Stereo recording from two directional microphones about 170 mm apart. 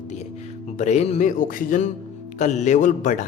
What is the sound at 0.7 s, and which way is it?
Speech, 45° left (ahead or behind).